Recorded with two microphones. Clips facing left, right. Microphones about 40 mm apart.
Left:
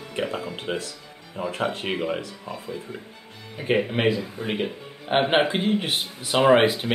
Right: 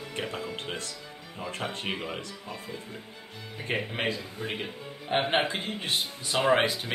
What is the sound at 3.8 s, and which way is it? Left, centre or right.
Speech, centre.